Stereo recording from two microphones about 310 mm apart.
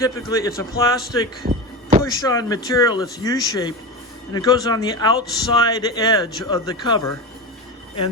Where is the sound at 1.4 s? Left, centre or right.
Centre.